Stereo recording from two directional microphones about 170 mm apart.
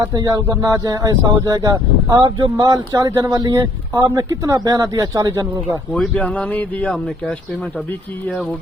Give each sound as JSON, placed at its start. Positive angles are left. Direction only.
{"t": 0.0, "sound": "speech", "side_deg": -20}
{"t": 5.9, "sound": "speech", "side_deg": 5}